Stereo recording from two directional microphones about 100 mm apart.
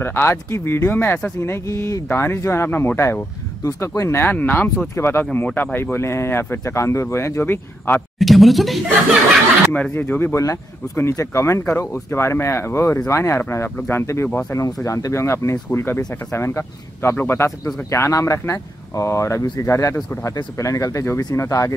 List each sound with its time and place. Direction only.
0.0 s speech: 25° left (ahead or behind)
8.2 s speech: centre (ahead or behind)
9.7 s speech: 15° left (ahead or behind); by 21.7 s 30° left (ahead or behind)